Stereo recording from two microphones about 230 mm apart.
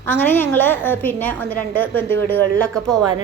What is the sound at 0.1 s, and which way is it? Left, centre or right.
A woman's voice, centre.